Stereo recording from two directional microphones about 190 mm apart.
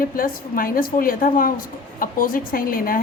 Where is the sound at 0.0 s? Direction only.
50° left (ahead or behind).